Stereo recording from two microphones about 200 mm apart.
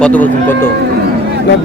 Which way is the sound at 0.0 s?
5° left (ahead or behind).